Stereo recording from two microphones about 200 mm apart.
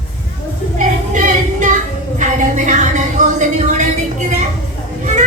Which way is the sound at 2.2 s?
40° right (ahead or behind).